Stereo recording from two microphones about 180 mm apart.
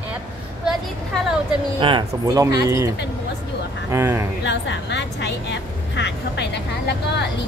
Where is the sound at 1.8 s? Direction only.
25° right (ahead or behind).